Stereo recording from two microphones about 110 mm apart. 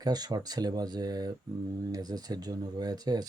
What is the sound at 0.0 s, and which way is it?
Speech, 40° right (ahead or behind).